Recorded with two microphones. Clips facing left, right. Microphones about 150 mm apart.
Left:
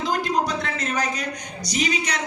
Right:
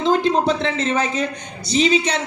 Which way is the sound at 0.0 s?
25° right (ahead or behind).